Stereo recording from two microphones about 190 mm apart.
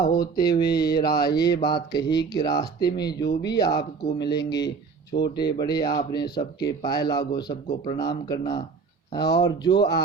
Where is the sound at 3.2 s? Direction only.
65° left (ahead or behind).